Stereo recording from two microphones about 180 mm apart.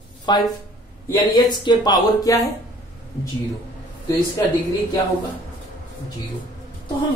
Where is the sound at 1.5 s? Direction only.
25° left (ahead or behind).